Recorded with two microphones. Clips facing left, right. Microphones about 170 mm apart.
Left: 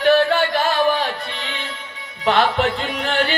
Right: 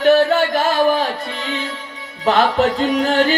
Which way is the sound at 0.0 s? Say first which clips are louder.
Right 2 dB; 40° right (ahead or behind).